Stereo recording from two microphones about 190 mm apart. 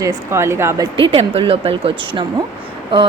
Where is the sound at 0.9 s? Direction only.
30° right (ahead or behind).